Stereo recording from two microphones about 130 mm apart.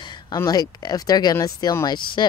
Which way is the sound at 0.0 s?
35° left (ahead or behind).